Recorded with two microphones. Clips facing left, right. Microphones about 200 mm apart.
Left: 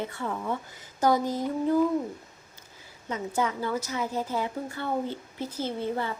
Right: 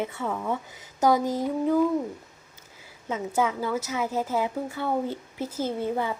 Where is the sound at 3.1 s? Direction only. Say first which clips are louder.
Right 3 dB; 20° right (ahead or behind).